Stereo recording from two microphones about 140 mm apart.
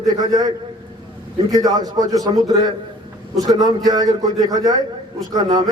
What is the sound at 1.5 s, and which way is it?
A man's voice, 30° right (ahead or behind).